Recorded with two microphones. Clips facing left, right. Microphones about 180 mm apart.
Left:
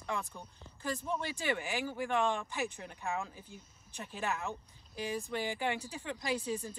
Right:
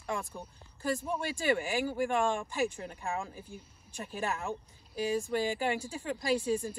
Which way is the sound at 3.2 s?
10° right (ahead or behind).